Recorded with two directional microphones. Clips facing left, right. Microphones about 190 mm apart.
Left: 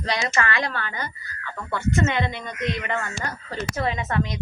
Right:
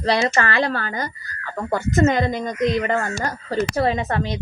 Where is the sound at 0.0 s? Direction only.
35° right (ahead or behind).